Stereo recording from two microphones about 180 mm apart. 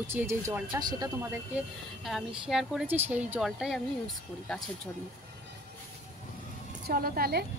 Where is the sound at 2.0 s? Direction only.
Centre (ahead or behind).